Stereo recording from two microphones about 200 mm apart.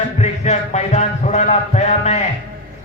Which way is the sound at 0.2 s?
35° left (ahead or behind).